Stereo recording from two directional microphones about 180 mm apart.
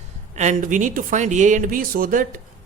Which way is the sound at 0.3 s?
45° right (ahead or behind).